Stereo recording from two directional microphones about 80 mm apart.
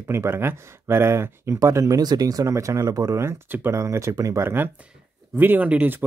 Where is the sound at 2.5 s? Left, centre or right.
Right.